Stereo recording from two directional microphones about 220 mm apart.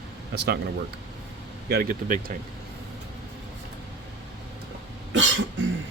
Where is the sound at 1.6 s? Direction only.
45° right (ahead or behind).